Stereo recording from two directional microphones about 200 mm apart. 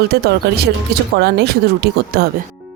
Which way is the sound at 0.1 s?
55° right (ahead or behind).